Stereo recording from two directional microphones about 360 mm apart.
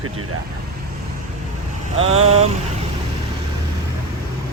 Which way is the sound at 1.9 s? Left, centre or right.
Centre.